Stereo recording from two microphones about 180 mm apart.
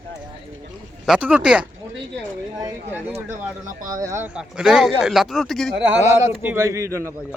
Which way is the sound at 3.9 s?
15° right (ahead or behind).